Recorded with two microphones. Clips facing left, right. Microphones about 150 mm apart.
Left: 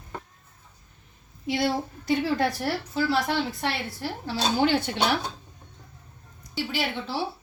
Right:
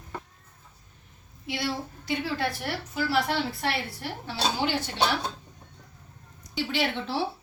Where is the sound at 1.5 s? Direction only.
45° left (ahead or behind).